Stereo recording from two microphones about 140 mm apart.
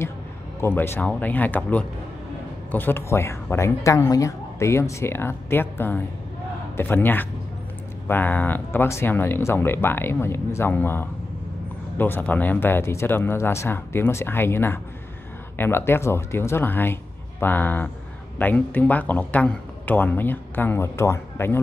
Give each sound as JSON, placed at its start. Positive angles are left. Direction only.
{"t": 0.6, "sound": "speech", "side_deg": 15}